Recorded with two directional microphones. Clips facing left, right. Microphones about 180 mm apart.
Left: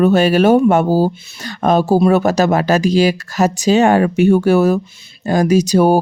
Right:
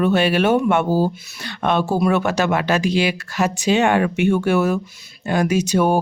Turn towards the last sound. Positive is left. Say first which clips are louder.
# left 6 dB
turn(degrees=35)  # may be behind; listen again after turning